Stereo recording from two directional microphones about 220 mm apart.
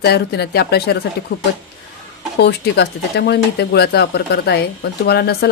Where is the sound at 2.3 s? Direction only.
50° left (ahead or behind).